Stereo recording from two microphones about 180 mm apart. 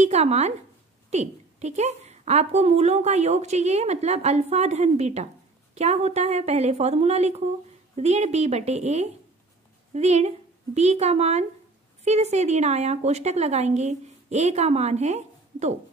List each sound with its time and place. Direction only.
0.0 s a woman's voice: 35° right (ahead or behind)